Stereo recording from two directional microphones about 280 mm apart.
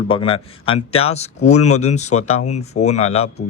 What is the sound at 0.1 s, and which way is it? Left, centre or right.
Speech, centre.